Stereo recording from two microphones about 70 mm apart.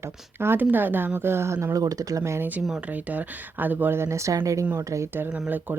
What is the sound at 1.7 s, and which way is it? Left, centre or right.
Speech, right.